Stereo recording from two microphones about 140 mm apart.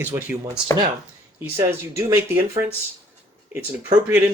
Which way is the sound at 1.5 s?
20° right (ahead or behind).